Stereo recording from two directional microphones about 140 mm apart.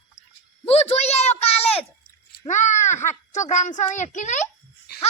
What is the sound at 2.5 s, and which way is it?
Speech, 55° left (ahead or behind).